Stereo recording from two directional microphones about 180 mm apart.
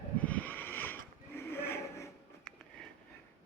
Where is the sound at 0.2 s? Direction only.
10° left (ahead or behind).